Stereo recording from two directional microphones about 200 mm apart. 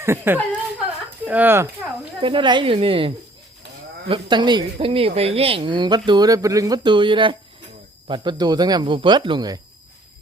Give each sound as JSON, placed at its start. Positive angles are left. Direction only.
{"t": 0.0, "sound": "speech", "side_deg": -10}
{"t": 2.2, "sound": "speech", "side_deg": -25}
{"t": 4.1, "sound": "speech", "side_deg": -20}